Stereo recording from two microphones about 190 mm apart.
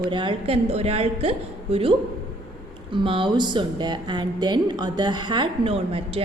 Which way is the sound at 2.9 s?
25° right (ahead or behind).